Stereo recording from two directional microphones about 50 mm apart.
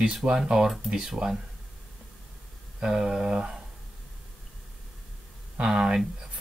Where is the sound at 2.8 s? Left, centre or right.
Centre.